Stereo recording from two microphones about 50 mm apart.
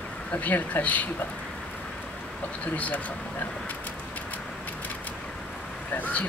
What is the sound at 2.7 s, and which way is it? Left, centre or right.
Speech, left.